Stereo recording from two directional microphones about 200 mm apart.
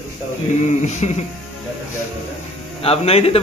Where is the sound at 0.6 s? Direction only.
35° left (ahead or behind).